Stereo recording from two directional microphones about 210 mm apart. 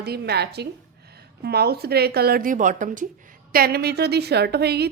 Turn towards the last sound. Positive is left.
turn(degrees=-50)  # may be behind; listen again after turning